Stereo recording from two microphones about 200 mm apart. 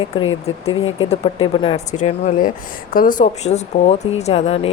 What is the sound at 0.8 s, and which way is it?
Speech, 80° left.